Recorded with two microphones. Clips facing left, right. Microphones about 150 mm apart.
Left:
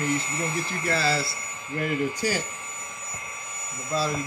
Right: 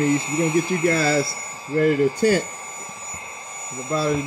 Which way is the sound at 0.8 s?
50° right (ahead or behind).